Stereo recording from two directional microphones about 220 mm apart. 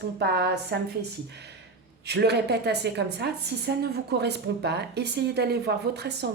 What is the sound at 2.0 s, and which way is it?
A woman's voice, 50° right (ahead or behind).